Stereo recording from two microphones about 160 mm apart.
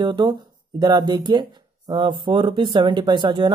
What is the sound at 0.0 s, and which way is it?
Speech, 30° right (ahead or behind).